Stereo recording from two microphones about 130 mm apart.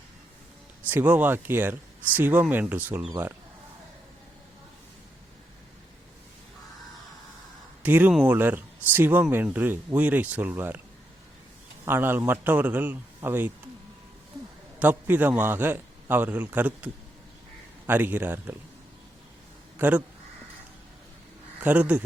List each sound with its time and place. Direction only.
0.9 s speech: 10° right (ahead or behind)
7.8 s speech: 10° right (ahead or behind)
11.9 s speech: 15° right (ahead or behind)
14.8 s speech: 15° right (ahead or behind)
21.6 s speech: 10° right (ahead or behind)